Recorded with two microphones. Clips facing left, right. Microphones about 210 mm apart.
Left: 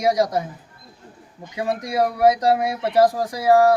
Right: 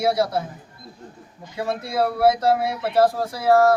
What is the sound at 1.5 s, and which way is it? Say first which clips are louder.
Speech: left 2 dB; 15° left (ahead or behind).